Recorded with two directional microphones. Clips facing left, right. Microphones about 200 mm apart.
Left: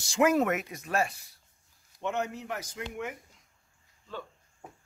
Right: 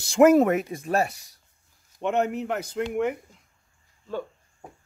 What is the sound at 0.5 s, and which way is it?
Speech, 30° right (ahead or behind).